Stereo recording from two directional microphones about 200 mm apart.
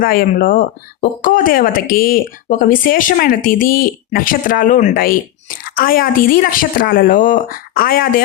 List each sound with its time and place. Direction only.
0.0 s speech: 45° left (ahead or behind)